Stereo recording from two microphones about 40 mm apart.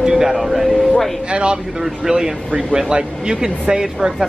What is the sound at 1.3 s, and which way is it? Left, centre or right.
Speech, right.